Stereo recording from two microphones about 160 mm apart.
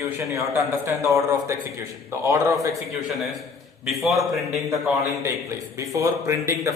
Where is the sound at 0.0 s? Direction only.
20° right (ahead or behind).